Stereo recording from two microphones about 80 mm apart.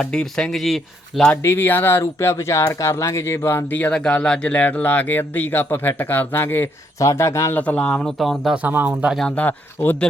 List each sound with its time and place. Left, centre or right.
0.0 s speech: centre
1.4 s speech: left
3.7 s speech: left
7.0 s speech: left
7.5 s speech: centre
8.2 s speech: centre
8.5 s speech: right
9.1 s speech: centre